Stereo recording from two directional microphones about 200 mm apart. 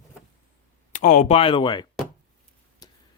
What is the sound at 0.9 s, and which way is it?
Speech, 40° left (ahead or behind).